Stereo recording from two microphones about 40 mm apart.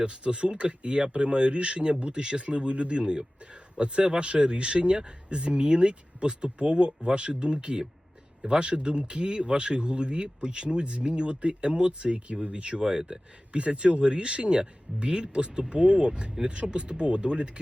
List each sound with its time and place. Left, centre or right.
0.0 s speech: right
12.8 s speech: centre